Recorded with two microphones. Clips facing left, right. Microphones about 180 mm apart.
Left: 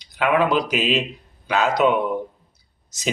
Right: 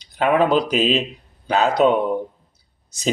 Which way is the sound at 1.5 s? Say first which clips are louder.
Right 2 dB; 30° right (ahead or behind).